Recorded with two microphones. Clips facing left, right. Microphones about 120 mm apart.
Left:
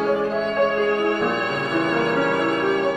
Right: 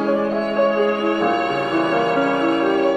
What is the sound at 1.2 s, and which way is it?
Music, 40° right (ahead or behind).